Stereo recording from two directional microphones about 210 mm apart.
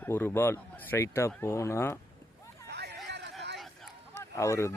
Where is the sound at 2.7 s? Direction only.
55° right (ahead or behind).